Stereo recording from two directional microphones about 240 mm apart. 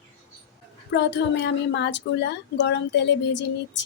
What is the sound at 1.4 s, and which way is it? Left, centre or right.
A woman's voice, left.